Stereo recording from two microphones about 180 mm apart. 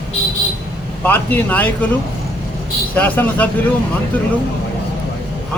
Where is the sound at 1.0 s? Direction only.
10° left (ahead or behind).